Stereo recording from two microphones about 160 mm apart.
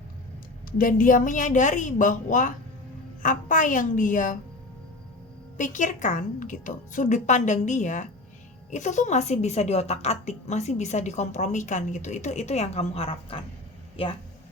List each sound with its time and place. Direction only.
0.8 s a woman's voice: 60° left (ahead or behind)
5.5 s a woman's voice: 50° left (ahead or behind); by 14.2 s 35° left (ahead or behind)